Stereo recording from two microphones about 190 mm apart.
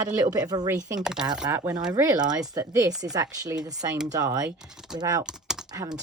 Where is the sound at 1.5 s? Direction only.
20° right (ahead or behind).